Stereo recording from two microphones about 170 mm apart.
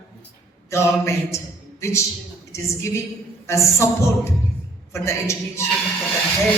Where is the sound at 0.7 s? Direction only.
15° left (ahead or behind).